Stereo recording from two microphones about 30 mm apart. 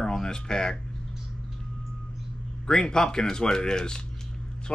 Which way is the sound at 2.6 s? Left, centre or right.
Left.